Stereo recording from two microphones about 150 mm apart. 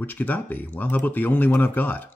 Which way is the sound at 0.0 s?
10° left (ahead or behind).